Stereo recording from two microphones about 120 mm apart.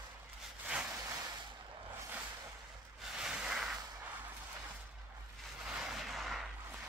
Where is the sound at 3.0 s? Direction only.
5° right (ahead or behind).